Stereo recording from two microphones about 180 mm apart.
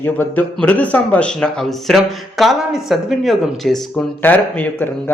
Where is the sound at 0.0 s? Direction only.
10° left (ahead or behind).